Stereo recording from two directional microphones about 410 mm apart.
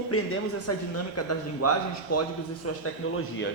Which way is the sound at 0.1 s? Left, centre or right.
Left.